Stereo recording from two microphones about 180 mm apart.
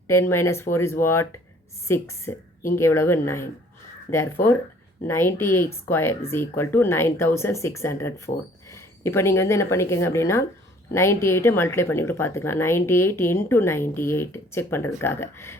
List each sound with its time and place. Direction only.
0.1 s speech: 15° left (ahead or behind)